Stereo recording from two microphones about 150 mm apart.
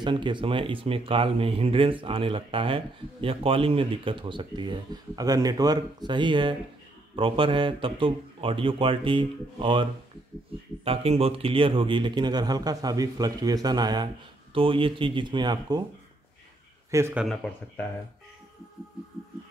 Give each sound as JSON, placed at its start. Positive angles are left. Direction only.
{"t": 0.0, "sound": "speech", "side_deg": -30}
{"t": 16.9, "sound": "speech", "side_deg": -15}
{"t": 17.2, "sound": "speech", "side_deg": 5}